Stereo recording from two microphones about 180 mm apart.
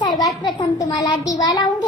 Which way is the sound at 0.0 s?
25° left (ahead or behind).